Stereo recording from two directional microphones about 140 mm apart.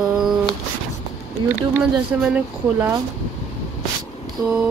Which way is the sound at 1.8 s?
5° right (ahead or behind).